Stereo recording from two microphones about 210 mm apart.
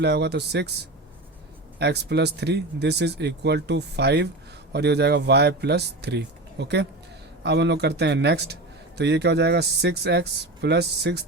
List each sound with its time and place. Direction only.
0.0 s speech: 55° right (ahead or behind)
1.8 s speech: 50° right (ahead or behind)